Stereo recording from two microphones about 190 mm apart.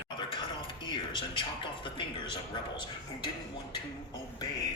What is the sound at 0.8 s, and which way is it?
A man's voice, 25° left (ahead or behind).